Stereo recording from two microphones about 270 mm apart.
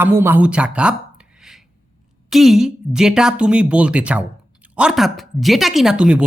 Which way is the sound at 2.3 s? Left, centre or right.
Centre.